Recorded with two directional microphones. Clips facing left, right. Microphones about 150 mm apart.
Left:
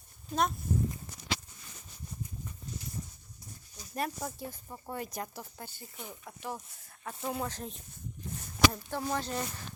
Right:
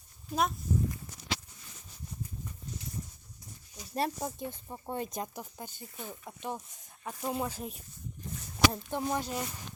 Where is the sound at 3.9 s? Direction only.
25° right (ahead or behind).